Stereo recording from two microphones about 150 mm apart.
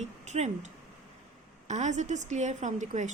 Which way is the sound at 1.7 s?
50° right (ahead or behind).